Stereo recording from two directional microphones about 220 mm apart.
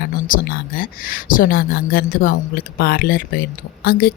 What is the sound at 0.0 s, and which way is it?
Speech, 40° left (ahead or behind).